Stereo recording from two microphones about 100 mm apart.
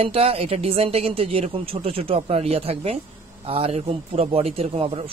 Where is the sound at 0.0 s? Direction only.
80° right.